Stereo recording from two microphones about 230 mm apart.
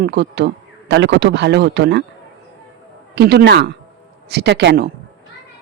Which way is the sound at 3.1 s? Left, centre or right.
Right.